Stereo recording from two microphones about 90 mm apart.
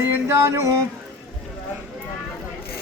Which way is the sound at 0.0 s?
30° right (ahead or behind).